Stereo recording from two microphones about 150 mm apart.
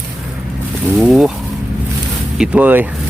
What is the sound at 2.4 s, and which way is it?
Speech, 10° right (ahead or behind).